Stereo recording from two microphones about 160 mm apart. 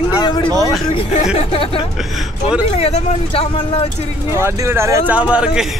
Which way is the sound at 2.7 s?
35° left (ahead or behind).